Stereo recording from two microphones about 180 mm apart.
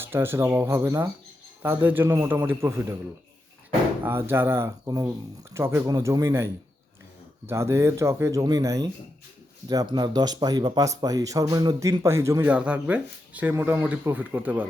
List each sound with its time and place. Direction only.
0.0 s speech: 15° right (ahead or behind)
4.0 s speech: 10° right (ahead or behind)